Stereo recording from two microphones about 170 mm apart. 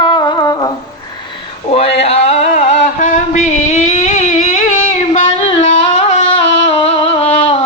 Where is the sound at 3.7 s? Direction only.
40° left (ahead or behind).